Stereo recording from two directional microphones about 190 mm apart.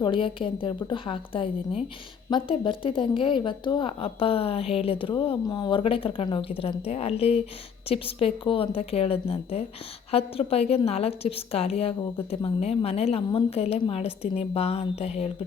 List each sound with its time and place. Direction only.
0.0 s a woman's voice: 25° left (ahead or behind)